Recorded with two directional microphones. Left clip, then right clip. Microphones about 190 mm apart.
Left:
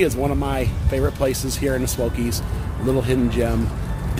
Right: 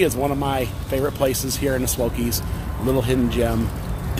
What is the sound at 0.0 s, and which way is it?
Speech, 10° right (ahead or behind).